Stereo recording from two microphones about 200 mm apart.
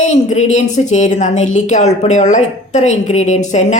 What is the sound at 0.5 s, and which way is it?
A woman's voice, 35° left (ahead or behind).